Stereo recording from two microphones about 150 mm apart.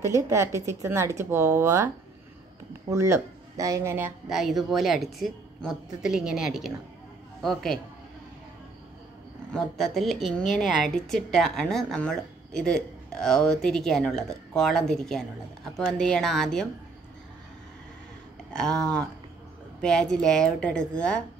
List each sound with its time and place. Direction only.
0.0 s speech: 20° right (ahead or behind)
2.9 s speech: 20° right (ahead or behind)
4.3 s a woman's voice: centre (ahead or behind)
9.5 s a woman's voice: 5° left (ahead or behind)
18.5 s a woman's voice: 5° left (ahead or behind)